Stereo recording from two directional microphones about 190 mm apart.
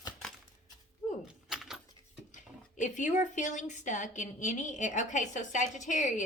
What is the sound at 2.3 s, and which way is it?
Speech, 40° left (ahead or behind).